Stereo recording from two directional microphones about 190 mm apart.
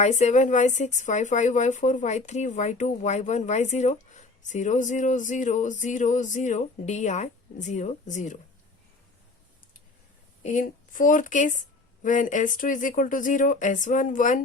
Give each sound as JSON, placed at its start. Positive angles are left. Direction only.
{"t": 0.0, "sound": "speech", "side_deg": 35}
{"t": 10.4, "sound": "speech", "side_deg": 40}